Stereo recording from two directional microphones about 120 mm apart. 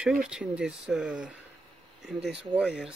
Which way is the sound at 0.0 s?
5° right (ahead or behind).